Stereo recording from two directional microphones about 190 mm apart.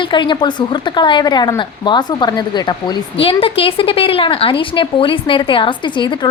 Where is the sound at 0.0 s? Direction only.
25° left (ahead or behind).